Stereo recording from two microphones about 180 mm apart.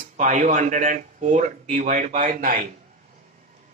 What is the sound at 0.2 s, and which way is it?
Speech, 45° right (ahead or behind).